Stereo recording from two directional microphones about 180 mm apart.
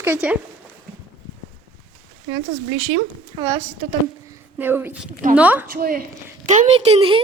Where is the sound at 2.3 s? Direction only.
20° right (ahead or behind).